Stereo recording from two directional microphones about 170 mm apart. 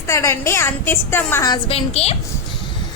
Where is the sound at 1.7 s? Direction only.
35° left (ahead or behind).